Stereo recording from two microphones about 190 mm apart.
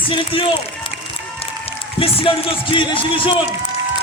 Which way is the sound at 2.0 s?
30° left (ahead or behind).